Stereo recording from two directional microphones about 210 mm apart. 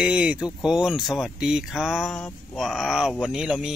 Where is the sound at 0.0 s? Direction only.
5° right (ahead or behind).